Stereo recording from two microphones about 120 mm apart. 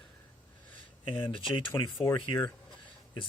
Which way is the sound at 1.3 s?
45° left (ahead or behind).